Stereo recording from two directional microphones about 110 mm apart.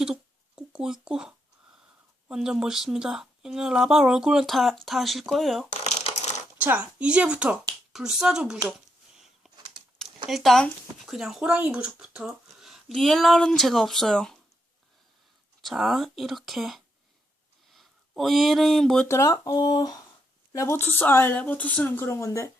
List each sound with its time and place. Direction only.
0.0 s a sound: 5° right (ahead or behind)
2.2 s speech: 5° right (ahead or behind)
5.8 s a sound: 85° left
6.6 s speech: 15° right (ahead or behind)
9.1 s a sound: 5° right (ahead or behind)
10.2 s speech: centre (ahead or behind)
15.6 s speech: 5° right (ahead or behind)
19.0 s a woman's voice: 25° left (ahead or behind)
20.7 s speech: 20° left (ahead or behind)